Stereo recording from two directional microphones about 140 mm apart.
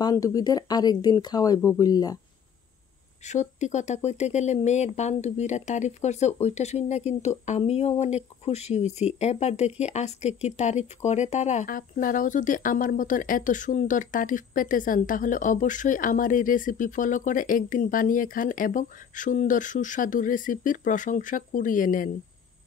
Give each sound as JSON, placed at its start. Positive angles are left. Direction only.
{"t": 0.0, "sound": "speech", "side_deg": 25}
{"t": 3.3, "sound": "speech", "side_deg": 60}